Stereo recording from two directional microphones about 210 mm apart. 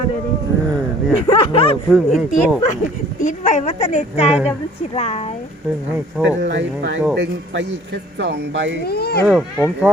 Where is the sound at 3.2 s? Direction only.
35° left (ahead or behind).